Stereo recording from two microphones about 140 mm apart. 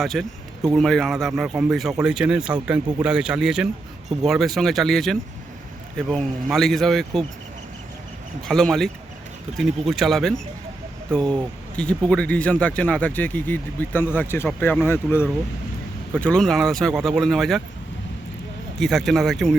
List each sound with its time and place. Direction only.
0.0 s speech: centre (ahead or behind)
8.4 s speech: 5° left (ahead or behind)
18.8 s speech: centre (ahead or behind)